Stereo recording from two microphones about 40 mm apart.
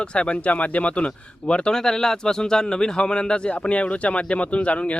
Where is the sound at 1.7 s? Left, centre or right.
Centre.